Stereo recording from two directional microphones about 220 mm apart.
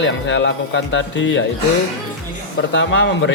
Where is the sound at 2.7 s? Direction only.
55° left (ahead or behind).